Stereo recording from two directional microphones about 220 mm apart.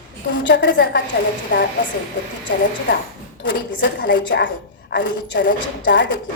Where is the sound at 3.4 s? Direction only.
50° left (ahead or behind).